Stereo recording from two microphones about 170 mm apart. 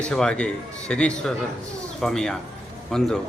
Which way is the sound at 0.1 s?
5° left (ahead or behind).